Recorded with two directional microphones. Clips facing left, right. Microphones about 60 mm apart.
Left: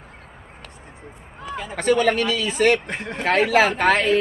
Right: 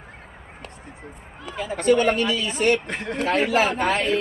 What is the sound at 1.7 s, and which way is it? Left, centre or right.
Speech, left.